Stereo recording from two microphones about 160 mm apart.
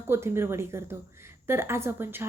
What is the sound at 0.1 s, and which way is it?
A woman's voice, 15° right (ahead or behind).